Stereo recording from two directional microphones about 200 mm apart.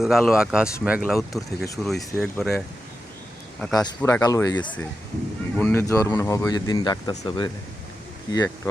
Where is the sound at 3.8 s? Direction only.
15° left (ahead or behind).